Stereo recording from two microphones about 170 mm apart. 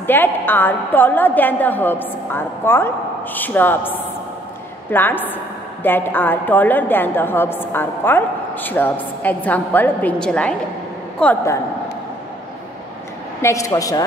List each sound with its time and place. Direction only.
0.0 s a woman's voice: 10° left (ahead or behind)
13.4 s a woman's voice: 15° left (ahead or behind)